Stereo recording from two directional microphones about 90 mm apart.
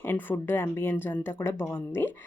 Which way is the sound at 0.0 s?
25° left (ahead or behind).